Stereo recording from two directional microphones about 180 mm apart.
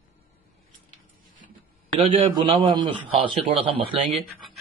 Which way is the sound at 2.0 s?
30° right (ahead or behind).